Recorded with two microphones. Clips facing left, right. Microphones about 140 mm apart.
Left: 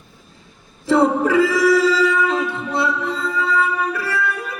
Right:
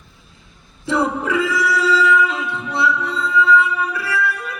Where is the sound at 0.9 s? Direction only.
40° left (ahead or behind).